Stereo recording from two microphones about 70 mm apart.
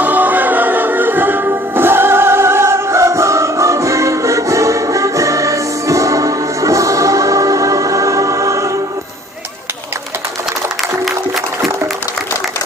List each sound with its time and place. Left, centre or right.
0.0 s music: right